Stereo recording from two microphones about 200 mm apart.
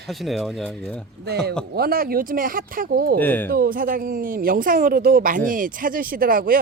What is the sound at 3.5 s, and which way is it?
Speech, 45° right (ahead or behind).